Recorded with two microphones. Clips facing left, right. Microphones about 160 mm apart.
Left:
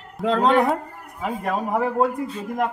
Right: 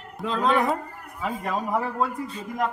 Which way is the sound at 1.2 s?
55° left (ahead or behind).